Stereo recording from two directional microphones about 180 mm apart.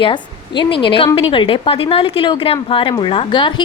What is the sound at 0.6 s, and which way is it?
A woman's voice, 30° left (ahead or behind).